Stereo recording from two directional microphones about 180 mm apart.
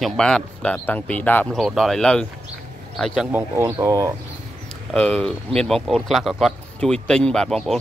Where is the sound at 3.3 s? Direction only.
15° right (ahead or behind).